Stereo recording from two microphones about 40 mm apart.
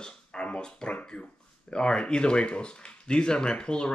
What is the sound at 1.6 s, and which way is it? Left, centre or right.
Speech, left.